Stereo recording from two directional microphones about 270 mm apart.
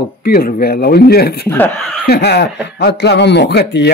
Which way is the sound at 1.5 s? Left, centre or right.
Centre.